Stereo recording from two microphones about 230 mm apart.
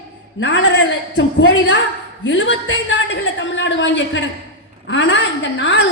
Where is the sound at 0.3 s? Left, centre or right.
Left.